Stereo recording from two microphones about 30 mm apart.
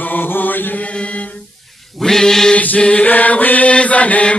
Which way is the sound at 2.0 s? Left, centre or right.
Centre.